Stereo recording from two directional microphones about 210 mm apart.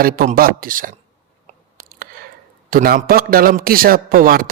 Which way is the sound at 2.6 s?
45° right (ahead or behind).